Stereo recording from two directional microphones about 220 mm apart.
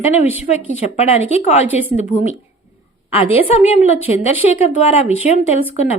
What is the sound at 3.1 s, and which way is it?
A woman's voice, 25° left (ahead or behind).